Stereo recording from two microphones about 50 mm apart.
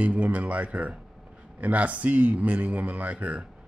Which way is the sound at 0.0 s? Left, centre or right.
Right.